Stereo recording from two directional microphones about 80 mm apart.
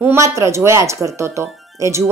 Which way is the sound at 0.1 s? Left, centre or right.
Right.